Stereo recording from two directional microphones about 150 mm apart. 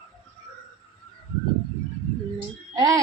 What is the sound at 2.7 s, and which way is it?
Speech, 20° right (ahead or behind).